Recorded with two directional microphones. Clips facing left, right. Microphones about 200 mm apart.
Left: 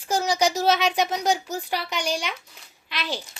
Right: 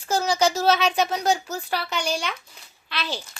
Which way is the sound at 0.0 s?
15° left (ahead or behind).